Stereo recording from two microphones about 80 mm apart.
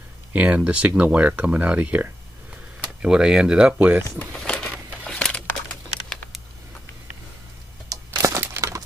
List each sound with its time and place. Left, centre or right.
0.3 s speech: centre
4.3 s a sound: centre
7.9 s crumpling: right